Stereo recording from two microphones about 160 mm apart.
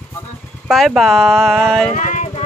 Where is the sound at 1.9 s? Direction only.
50° left (ahead or behind).